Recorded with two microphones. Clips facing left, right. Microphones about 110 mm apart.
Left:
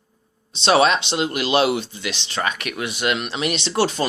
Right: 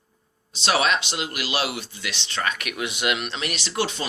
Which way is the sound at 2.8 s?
15° right (ahead or behind).